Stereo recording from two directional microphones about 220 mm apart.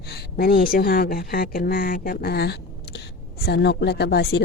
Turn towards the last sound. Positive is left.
turn(degrees=50)  # may be behind; listen again after turning